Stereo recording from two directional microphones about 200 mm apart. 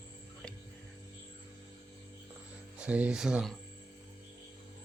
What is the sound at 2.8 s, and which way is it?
Speech, 5° right (ahead or behind).